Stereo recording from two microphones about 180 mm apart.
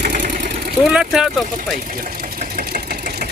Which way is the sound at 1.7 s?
50° right (ahead or behind).